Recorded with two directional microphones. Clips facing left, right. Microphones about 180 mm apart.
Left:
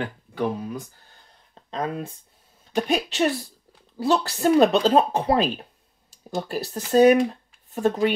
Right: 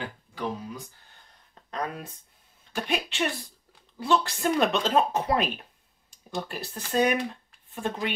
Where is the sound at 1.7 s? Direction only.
25° left (ahead or behind).